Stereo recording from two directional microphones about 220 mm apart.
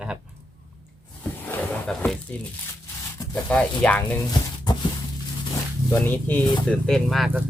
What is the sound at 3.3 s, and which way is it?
Speech, 5° left (ahead or behind).